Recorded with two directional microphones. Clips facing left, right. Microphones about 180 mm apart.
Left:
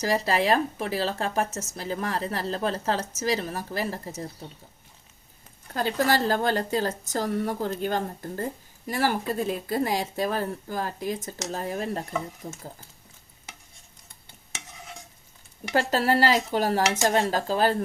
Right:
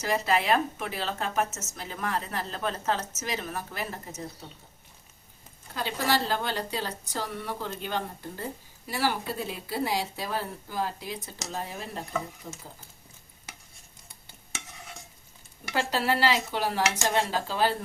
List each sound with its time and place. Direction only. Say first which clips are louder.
0.0 s speech: left 3 dB; 35° left (ahead or behind)
5.7 s a woman's voice: left 4 dB; 45° left (ahead or behind)
15.7 s a woman's voice: left 4 dB; 45° left (ahead or behind)